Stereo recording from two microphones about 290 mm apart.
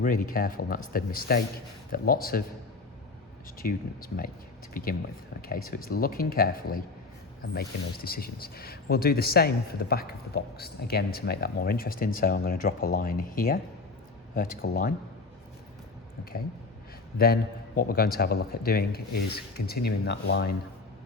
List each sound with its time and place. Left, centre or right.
0.0 s speech: left
3.6 s speech: left
14.6 s speech: left
17.2 s speech: left